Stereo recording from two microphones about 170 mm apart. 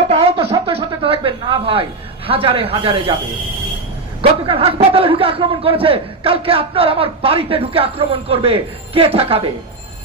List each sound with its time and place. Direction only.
0.1 s speech: 35° right (ahead or behind)
4.2 s a man's voice: 35° right (ahead or behind)